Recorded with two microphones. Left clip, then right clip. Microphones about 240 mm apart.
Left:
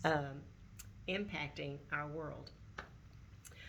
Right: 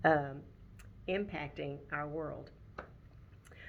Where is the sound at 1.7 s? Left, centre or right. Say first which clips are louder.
Right 2 dB; left.